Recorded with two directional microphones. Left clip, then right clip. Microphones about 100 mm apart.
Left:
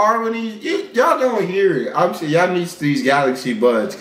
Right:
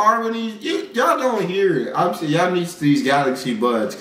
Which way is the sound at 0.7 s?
15° right (ahead or behind).